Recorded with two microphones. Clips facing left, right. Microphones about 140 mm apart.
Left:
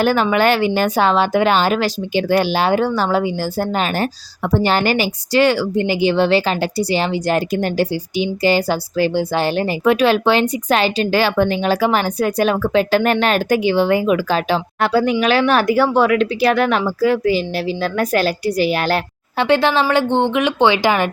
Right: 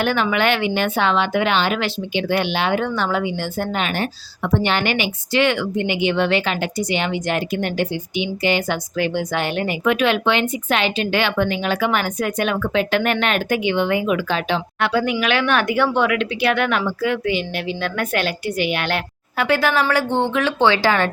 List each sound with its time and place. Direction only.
0.0 s speech: 40° left (ahead or behind)
19.5 s speech: 25° left (ahead or behind)